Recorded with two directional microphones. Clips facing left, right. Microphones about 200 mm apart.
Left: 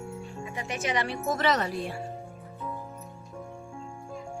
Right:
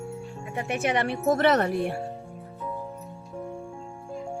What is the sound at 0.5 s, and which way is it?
A woman's voice, 55° right (ahead or behind).